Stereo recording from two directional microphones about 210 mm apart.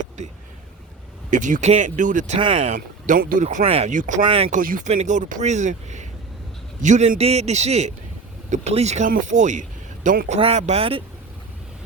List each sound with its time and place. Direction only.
1.3 s speech: 35° right (ahead or behind)
2.4 s speech: 25° right (ahead or behind)
2.7 s speech: 40° right (ahead or behind)
4.2 s speech: 25° right (ahead or behind)
4.6 s speech: 40° right (ahead or behind)